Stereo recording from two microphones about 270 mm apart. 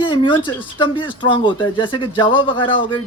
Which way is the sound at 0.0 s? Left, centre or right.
Centre.